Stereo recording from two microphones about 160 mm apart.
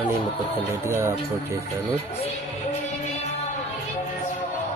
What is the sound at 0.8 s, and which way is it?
Speech, 15° right (ahead or behind).